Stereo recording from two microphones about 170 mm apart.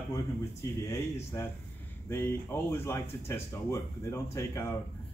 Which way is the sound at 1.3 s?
20° left (ahead or behind).